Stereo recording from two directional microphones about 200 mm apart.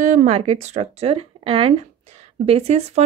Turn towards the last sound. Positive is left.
turn(degrees=-35)  # may be behind; listen again after turning